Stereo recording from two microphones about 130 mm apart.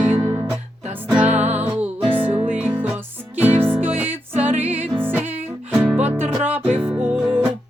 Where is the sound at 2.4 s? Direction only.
15° right (ahead or behind).